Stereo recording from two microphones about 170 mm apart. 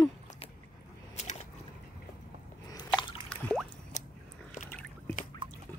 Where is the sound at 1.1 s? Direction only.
45° left (ahead or behind).